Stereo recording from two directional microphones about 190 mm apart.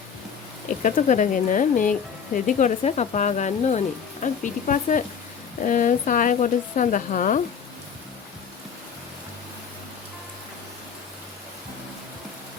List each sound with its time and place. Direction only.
0.8 s a woman's voice: 40° left (ahead or behind)